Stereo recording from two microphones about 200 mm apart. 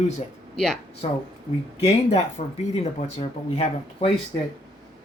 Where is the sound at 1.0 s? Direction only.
30° left (ahead or behind).